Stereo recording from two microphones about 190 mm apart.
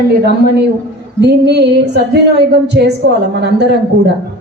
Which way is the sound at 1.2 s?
60° right (ahead or behind).